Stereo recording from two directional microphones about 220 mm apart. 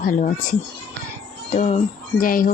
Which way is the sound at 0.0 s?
35° left (ahead or behind).